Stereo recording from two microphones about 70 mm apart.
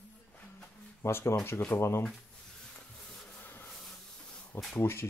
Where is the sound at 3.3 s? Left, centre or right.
Left.